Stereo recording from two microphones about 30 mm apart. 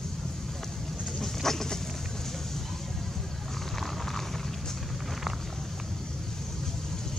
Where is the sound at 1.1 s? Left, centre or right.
Centre.